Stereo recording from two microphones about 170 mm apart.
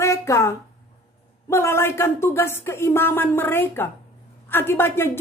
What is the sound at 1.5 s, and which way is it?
Speech, 15° left (ahead or behind).